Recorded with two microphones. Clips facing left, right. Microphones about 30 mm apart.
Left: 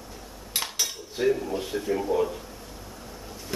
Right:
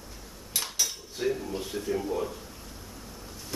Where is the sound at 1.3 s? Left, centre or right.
Centre.